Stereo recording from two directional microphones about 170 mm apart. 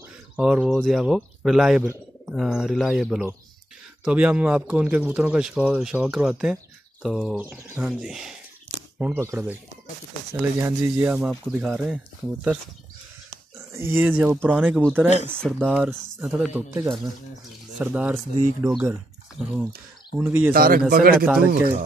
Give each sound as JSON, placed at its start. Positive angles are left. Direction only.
{"t": 0.4, "sound": "speech", "side_deg": -5}
{"t": 7.9, "sound": "speech", "side_deg": 0}
{"t": 13.7, "sound": "speech", "side_deg": -10}
{"t": 15.3, "sound": "speech", "side_deg": 5}
{"t": 15.7, "sound": "speech", "side_deg": -5}
{"t": 20.5, "sound": "speech", "side_deg": -60}